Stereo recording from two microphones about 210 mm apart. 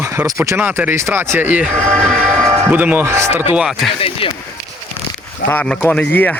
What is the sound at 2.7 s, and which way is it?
Speech, 10° right (ahead or behind).